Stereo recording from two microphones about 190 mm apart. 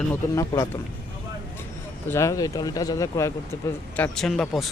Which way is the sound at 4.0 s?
5° left (ahead or behind).